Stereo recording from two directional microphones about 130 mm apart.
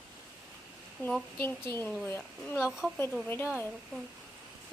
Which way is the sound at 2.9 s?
15° left (ahead or behind).